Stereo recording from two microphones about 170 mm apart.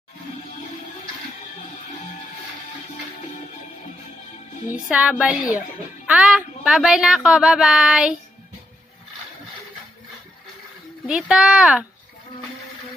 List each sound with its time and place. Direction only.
4.8 s speech: 5° right (ahead or behind)
11.1 s speech: 5° right (ahead or behind)